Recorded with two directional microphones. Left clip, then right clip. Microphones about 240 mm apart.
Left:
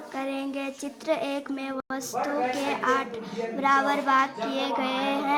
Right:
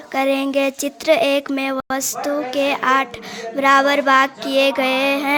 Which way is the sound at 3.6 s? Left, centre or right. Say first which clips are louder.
Right 9 dB; right.